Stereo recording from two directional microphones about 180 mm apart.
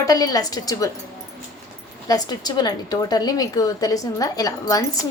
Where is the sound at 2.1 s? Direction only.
20° left (ahead or behind).